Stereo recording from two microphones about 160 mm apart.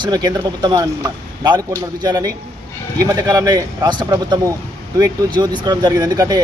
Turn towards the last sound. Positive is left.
turn(degrees=-25)  # may be behind; listen again after turning